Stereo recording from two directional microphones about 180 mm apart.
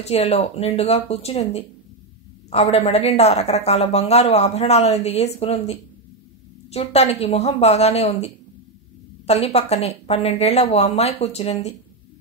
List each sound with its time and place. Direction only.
0.0 s a woman's voice: 35° left (ahead or behind)